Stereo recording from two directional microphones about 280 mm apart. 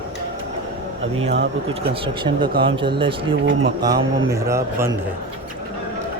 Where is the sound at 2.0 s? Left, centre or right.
Centre.